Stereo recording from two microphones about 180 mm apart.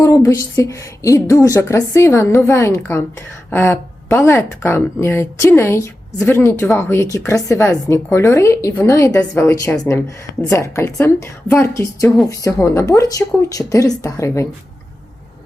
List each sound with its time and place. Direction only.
0.0 s speech: 15° left (ahead or behind)